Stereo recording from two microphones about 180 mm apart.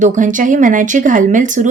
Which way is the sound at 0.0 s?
45° right (ahead or behind).